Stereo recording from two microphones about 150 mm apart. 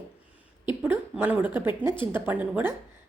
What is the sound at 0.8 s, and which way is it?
A woman's voice, 15° right (ahead or behind).